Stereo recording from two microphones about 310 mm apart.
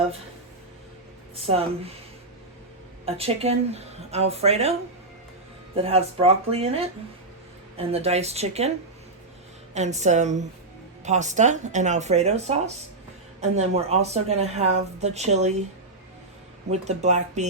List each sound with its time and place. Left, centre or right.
1.4 s speech: centre
3.1 s speech: centre
5.7 s speech: centre
9.7 s speech: right
16.7 s speech: right